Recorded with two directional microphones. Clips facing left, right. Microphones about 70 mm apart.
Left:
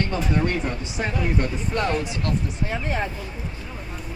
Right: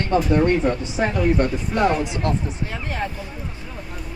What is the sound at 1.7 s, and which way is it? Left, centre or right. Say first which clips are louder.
Speech: right 5 dB; centre.